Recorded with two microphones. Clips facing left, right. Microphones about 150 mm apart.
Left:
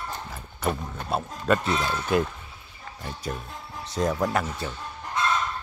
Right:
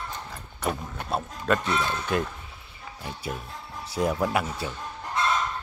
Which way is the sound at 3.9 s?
10° right (ahead or behind).